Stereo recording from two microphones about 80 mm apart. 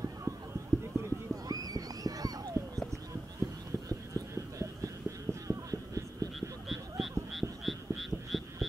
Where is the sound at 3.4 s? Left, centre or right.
Right.